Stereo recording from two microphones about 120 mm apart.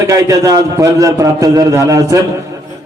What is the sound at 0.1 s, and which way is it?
A man's voice, 30° right (ahead or behind).